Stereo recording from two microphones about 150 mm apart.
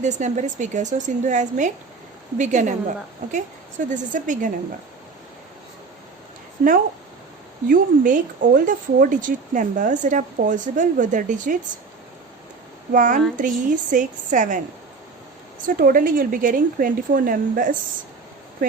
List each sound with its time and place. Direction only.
0.0 s a woman's voice: 50° right (ahead or behind)
3.8 s speech: 60° right (ahead or behind)
6.6 s a woman's voice: 75° right (ahead or behind)
7.7 s speech: 60° right (ahead or behind)
12.9 s speech: 60° right (ahead or behind)
15.6 s a woman's voice: 65° right (ahead or behind)